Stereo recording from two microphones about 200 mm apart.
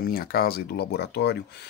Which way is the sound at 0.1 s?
50° left (ahead or behind).